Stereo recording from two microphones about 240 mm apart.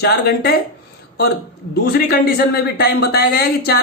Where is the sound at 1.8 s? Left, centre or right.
Left.